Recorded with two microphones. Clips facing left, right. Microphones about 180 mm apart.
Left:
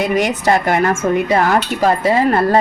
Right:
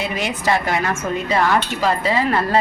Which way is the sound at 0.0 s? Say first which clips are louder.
Left 8 dB; 55° left (ahead or behind).